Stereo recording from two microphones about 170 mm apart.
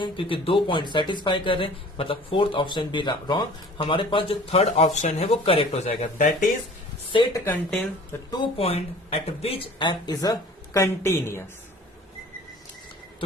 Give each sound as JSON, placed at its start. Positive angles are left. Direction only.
{"t": 0.0, "sound": "speech", "side_deg": 30}
{"t": 7.1, "sound": "speech", "side_deg": 30}
{"t": 7.4, "sound": "speech", "side_deg": 10}
{"t": 8.3, "sound": "speech", "side_deg": 30}